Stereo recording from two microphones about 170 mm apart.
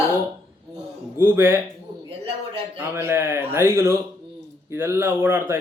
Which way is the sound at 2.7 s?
15° right (ahead or behind).